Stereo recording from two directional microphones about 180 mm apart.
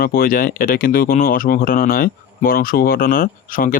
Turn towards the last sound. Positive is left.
turn(degrees=50)  # may be behind; listen again after turning